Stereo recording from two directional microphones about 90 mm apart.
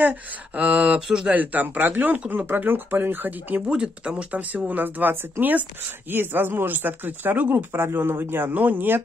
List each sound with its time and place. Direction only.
0.6 s speech: 15° right (ahead or behind)
1.4 s speech: 20° right (ahead or behind)